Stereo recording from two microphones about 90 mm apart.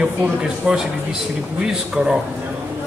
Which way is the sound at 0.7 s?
15° right (ahead or behind).